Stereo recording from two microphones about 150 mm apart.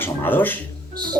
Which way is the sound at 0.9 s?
30° right (ahead or behind).